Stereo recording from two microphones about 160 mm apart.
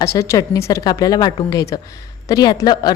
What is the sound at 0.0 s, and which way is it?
Speech, 20° left (ahead or behind).